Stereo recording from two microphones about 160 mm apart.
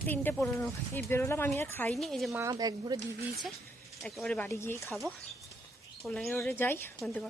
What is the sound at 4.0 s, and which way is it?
Speech, 5° left (ahead or behind).